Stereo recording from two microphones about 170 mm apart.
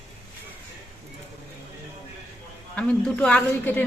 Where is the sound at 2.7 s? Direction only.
5° left (ahead or behind).